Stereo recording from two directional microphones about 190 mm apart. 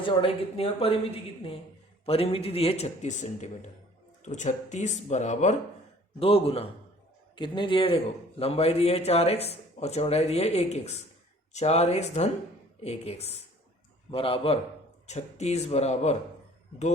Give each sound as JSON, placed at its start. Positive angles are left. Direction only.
{"t": 0.0, "sound": "speech", "side_deg": 30}
{"t": 2.0, "sound": "a man's voice", "side_deg": 30}